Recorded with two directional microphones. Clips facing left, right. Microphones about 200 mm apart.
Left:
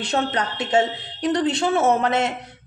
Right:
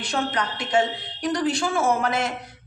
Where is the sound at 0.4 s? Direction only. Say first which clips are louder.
Left 1 dB; 25° left (ahead or behind).